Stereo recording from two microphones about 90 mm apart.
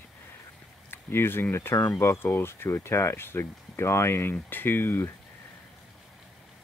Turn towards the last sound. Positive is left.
turn(degrees=25)  # may be behind; listen again after turning